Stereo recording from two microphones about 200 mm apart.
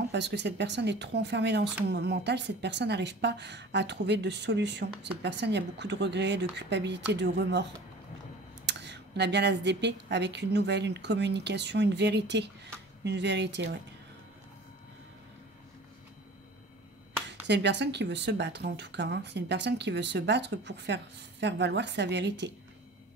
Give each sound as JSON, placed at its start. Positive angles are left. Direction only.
{"t": 0.1, "sound": "speech", "side_deg": -60}
{"t": 8.6, "sound": "speech", "side_deg": -60}
{"t": 17.5, "sound": "speech", "side_deg": -60}